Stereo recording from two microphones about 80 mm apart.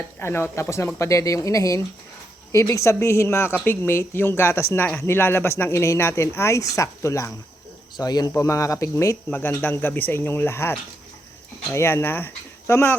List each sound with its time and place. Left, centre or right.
0.2 s speech: left
7.9 s speech: left
8.4 s speech: left
9.3 s speech: left